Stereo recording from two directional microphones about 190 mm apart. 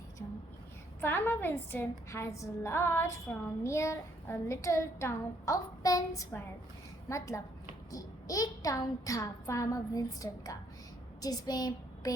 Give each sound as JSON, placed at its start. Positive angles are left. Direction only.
{"t": 1.0, "sound": "a woman's voice", "side_deg": 10}